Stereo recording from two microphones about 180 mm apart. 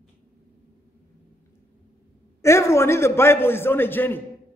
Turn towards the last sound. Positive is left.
turn(degrees=10)  # may be behind; listen again after turning